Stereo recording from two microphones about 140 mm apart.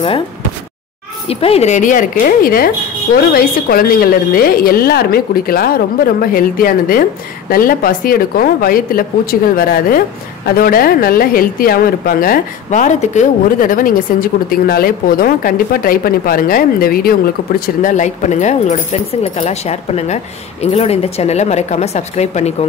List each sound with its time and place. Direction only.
1.4 s a woman's voice: 50° left (ahead or behind); by 17.2 s 90° left
17.8 s speech: 60° left (ahead or behind)